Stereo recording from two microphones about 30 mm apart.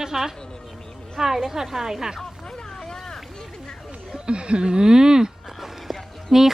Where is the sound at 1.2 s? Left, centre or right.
Centre.